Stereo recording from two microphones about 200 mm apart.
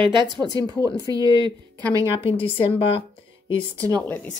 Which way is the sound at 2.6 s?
30° left (ahead or behind).